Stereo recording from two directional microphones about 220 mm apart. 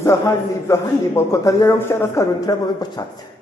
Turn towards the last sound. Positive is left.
turn(degrees=15)  # may be behind; listen again after turning